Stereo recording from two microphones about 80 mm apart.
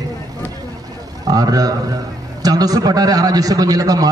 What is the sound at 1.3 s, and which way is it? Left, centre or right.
A man's voice, right.